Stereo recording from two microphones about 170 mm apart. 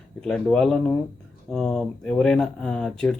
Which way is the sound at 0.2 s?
5° left (ahead or behind).